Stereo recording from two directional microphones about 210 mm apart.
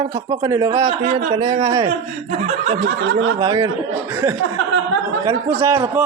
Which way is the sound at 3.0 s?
65° right (ahead or behind).